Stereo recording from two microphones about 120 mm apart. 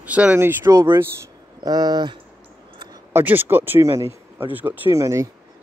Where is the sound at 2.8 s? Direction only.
30° right (ahead or behind).